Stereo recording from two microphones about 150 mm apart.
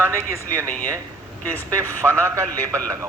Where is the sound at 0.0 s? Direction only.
15° right (ahead or behind).